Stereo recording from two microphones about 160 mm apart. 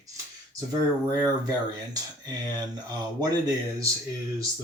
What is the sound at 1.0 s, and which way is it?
Speech, 25° right (ahead or behind).